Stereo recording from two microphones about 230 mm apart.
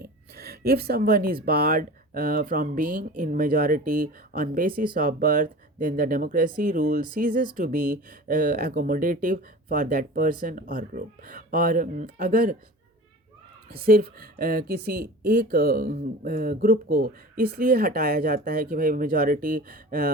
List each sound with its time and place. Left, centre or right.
0.0 s speech: right
13.7 s speech: right